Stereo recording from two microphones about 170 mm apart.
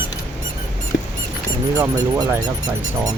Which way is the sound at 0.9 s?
90° left.